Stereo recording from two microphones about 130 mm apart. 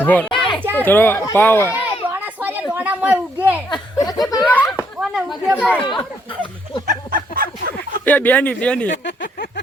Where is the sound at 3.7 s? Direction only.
30° left (ahead or behind).